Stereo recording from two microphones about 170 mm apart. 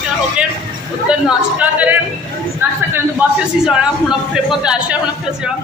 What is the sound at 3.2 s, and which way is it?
Speech, 10° right (ahead or behind).